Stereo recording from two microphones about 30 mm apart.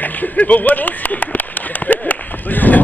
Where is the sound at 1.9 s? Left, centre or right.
Left.